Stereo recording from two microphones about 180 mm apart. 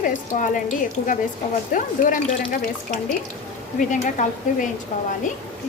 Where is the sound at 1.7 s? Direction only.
45° left (ahead or behind).